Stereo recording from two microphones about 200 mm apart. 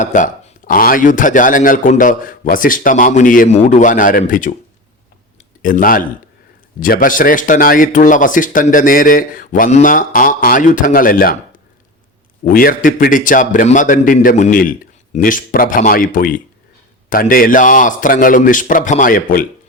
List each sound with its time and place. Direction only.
0.0 s a man's voice: 40° left (ahead or behind)
5.6 s speech: 45° left (ahead or behind)
12.5 s speech: 45° left (ahead or behind)